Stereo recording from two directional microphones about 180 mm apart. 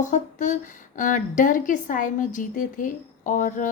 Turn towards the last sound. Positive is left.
turn(degrees=45)  # may be behind; listen again after turning